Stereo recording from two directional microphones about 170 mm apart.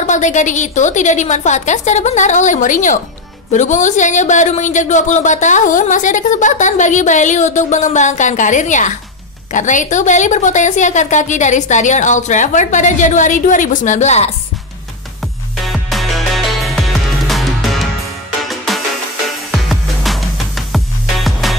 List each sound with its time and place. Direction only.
0.0 s speech: 45° left (ahead or behind)
15.6 s music: centre (ahead or behind)